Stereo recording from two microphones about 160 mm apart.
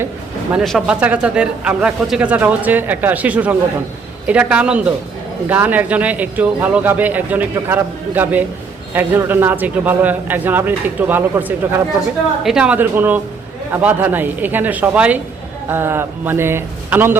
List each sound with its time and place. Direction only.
0.5 s speech: centre (ahead or behind)